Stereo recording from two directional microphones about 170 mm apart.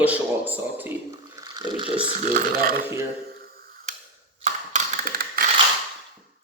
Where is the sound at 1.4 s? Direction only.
25° right (ahead or behind).